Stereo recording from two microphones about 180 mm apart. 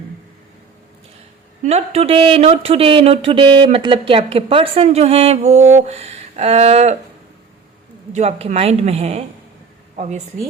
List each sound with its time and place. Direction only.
1.6 s speech: 35° right (ahead or behind)
8.1 s speech: 40° right (ahead or behind)